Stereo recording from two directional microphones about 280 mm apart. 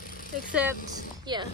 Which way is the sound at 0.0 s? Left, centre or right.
Left.